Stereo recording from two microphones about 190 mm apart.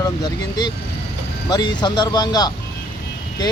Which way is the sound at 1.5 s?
25° left (ahead or behind).